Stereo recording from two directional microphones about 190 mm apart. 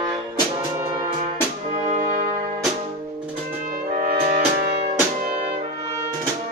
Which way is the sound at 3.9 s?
45° right (ahead or behind).